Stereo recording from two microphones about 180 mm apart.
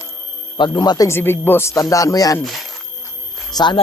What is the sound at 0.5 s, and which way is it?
Speech, 25° left (ahead or behind).